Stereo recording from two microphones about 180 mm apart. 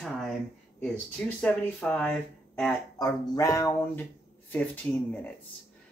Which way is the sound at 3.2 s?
20° left (ahead or behind).